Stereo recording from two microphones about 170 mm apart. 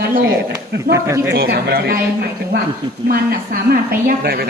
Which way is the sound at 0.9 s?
15° right (ahead or behind).